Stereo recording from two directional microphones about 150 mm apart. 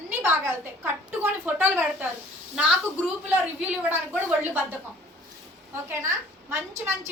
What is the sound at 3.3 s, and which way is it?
A woman's voice, 10° right (ahead or behind).